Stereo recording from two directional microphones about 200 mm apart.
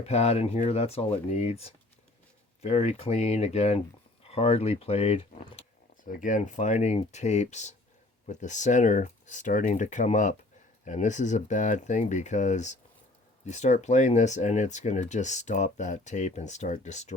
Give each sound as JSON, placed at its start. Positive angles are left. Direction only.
{"t": 0.0, "sound": "speech", "side_deg": 30}
{"t": 6.1, "sound": "speech", "side_deg": 40}